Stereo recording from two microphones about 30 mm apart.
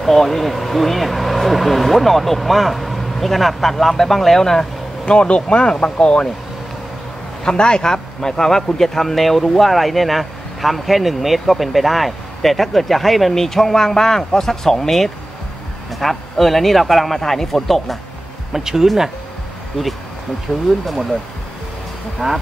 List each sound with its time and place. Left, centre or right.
0.0 s speech: centre
5.0 s speech: left
7.4 s a man's voice: left; by 17.9 s centre
18.5 s speech: centre
20.8 s speech: centre
22.2 s speech: centre